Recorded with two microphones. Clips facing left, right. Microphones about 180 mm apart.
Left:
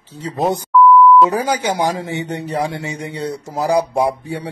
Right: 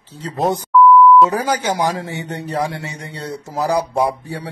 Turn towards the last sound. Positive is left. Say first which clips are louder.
# left 1 dB
turn(degrees=15)  # may be behind; listen again after turning